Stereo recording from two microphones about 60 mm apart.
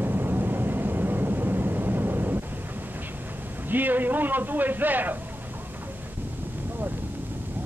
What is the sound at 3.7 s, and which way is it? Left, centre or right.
A man's voice, right.